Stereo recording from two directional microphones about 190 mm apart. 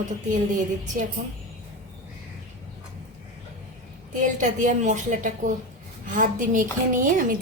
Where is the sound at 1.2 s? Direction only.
40° right (ahead or behind).